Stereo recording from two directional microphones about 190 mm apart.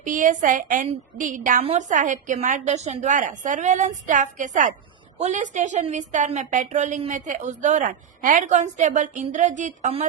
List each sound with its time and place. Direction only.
0.0 s a woman's voice: 45° right (ahead or behind)